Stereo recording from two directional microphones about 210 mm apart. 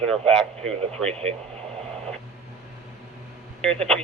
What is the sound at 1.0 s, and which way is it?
Speech, 30° right (ahead or behind).